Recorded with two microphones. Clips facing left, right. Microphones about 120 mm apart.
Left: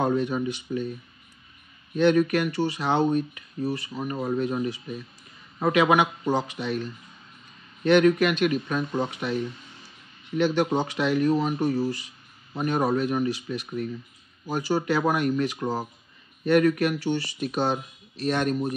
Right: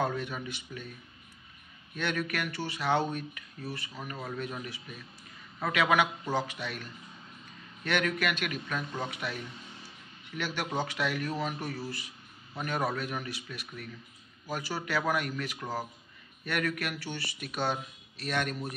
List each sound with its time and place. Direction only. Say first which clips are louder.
0.0 s speech: left 8 dB; 25° left (ahead or behind)
2.0 s a man's voice: left 13 dB; 25° left (ahead or behind)